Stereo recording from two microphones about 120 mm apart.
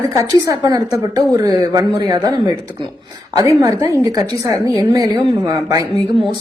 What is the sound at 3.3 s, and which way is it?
Speech, 30° right (ahead or behind).